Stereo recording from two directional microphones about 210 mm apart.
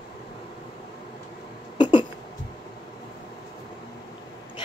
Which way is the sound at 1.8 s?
20° left (ahead or behind).